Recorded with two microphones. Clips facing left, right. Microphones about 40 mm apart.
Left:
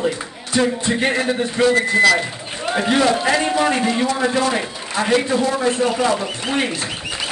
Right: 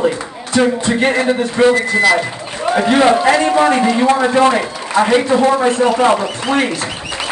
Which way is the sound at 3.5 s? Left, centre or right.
Right.